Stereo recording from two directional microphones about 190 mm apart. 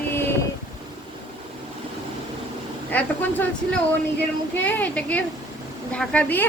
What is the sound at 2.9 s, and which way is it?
A woman's voice, 10° left (ahead or behind).